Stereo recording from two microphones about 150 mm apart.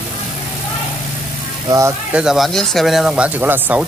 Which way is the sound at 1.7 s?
20° right (ahead or behind).